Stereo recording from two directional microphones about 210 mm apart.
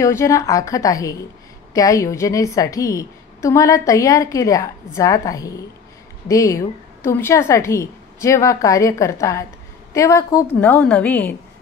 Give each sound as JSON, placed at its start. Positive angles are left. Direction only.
{"t": 0.0, "sound": "a woman's voice", "side_deg": 15}